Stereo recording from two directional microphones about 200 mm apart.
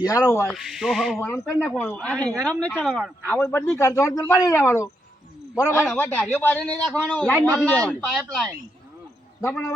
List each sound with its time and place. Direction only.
0.0 s speech: 15° left (ahead or behind)
0.5 s speech: centre (ahead or behind)
1.2 s speech: 15° left (ahead or behind)
9.4 s speech: 10° left (ahead or behind)